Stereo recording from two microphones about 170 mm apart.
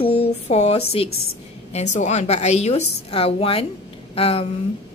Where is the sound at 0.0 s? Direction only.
35° left (ahead or behind).